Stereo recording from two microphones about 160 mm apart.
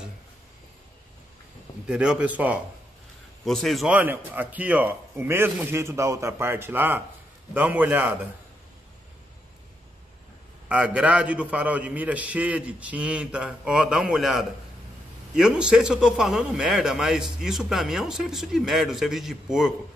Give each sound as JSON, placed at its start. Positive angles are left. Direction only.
{"t": 1.9, "sound": "a man's voice", "side_deg": -5}
{"t": 3.4, "sound": "a man's voice", "side_deg": 0}
{"t": 10.7, "sound": "a man's voice", "side_deg": -5}